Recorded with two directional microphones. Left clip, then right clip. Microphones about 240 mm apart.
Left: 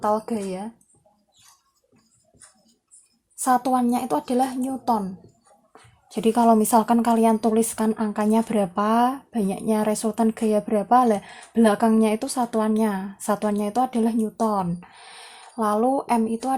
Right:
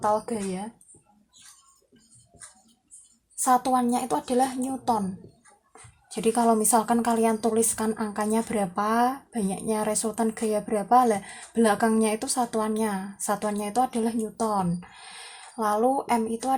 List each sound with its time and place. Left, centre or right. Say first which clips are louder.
0.0 s speech: left 2 dB; left
3.4 s speech: left 2 dB; left